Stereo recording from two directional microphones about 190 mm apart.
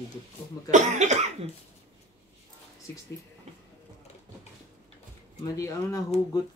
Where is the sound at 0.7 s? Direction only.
40° right (ahead or behind).